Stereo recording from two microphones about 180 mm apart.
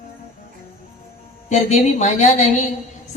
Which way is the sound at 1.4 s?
40° left (ahead or behind).